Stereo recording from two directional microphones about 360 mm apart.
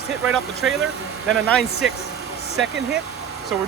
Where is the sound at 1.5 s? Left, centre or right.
Centre.